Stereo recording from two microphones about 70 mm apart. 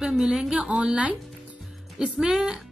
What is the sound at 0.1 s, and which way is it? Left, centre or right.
A woman's voice, centre.